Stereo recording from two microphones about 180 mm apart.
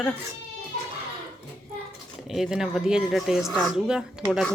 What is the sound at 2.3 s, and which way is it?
Speech, centre (ahead or behind).